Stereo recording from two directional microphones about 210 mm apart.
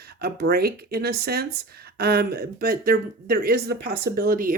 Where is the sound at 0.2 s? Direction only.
45° right (ahead or behind).